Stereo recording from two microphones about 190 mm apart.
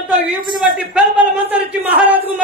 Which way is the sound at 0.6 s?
5° right (ahead or behind).